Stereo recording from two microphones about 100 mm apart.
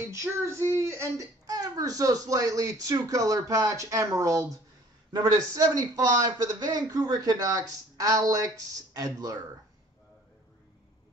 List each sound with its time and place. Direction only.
0.0 s a man's voice: 30° right (ahead or behind)